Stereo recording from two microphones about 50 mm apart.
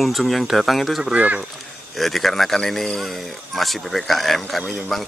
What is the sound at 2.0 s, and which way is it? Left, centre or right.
Speech, centre.